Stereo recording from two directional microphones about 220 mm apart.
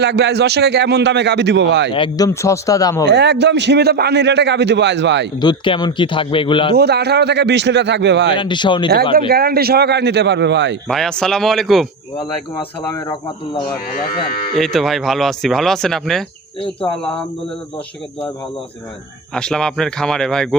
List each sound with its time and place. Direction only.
0.0 s a man's voice: 50° right (ahead or behind)
1.9 s speech: 20° left (ahead or behind)
3.1 s a man's voice: 50° right (ahead or behind)
5.4 s speech: 20° left (ahead or behind)
6.7 s a man's voice: 50° right (ahead or behind)
8.4 s speech: 20° left (ahead or behind)
9.1 s a man's voice: 45° right (ahead or behind)
10.8 s speech: centre (ahead or behind)
12.2 s speech: 20° left (ahead or behind)
14.5 s speech: centre (ahead or behind)
19.3 s speech: 5° left (ahead or behind)